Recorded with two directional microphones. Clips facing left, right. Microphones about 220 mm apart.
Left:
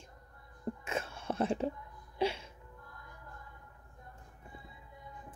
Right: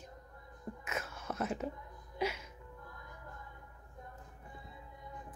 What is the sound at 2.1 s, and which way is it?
Music, 30° left (ahead or behind).